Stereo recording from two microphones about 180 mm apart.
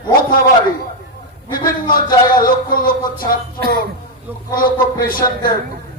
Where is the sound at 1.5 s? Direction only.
50° left (ahead or behind).